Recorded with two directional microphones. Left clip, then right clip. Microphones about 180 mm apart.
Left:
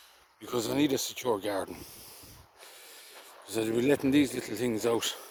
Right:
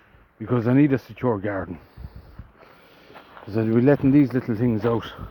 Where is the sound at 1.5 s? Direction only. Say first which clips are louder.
Right 4 dB; 15° left (ahead or behind).